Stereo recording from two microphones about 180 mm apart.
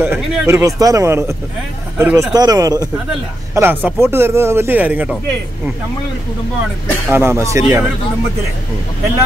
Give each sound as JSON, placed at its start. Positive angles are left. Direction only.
{"t": 0.0, "sound": "a man's voice", "side_deg": -10}
{"t": 7.1, "sound": "speech", "side_deg": -15}